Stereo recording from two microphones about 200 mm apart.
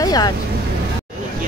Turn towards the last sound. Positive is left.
turn(degrees=20)  # may be behind; listen again after turning